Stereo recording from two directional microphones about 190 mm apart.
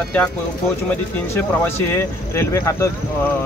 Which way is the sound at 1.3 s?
10° left (ahead or behind).